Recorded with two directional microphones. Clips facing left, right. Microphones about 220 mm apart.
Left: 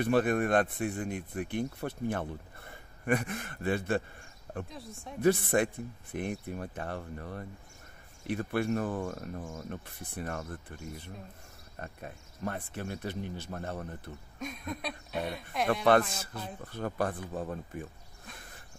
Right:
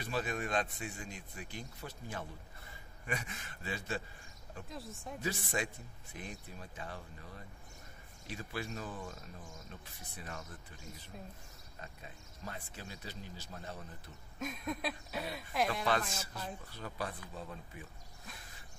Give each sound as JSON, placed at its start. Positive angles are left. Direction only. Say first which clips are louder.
{"t": 0.0, "sound": "speech", "louder": "left 11 dB", "side_deg": 60}
{"t": 4.6, "sound": "speech", "louder": "left 1 dB", "side_deg": 0}
{"t": 5.2, "sound": "speech", "louder": "left 13 dB", "side_deg": 55}
{"t": 14.4, "sound": "speech", "louder": "even", "side_deg": 0}
{"t": 15.7, "sound": "speech", "louder": "left 10 dB", "side_deg": 55}